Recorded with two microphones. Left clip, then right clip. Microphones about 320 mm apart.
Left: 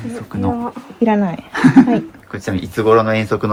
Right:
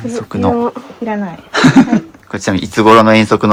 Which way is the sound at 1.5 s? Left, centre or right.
Centre.